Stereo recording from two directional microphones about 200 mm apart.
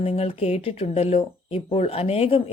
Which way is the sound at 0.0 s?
30° left (ahead or behind).